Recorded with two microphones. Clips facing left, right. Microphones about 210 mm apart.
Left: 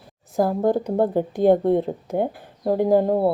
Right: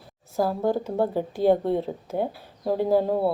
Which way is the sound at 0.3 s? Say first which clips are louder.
Left 4 dB; 15° left (ahead or behind).